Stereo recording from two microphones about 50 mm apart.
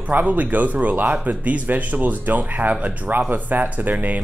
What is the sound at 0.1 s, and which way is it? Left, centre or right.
Speech, right.